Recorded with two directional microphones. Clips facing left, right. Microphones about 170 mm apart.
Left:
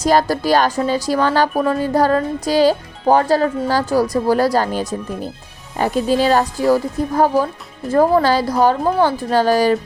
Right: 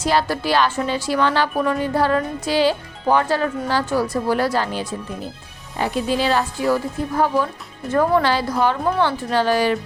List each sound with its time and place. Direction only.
0.0 s speech: 40° left (ahead or behind)